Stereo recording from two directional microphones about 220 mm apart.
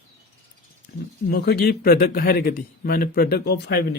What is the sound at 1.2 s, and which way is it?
A man's voice, 45° left (ahead or behind).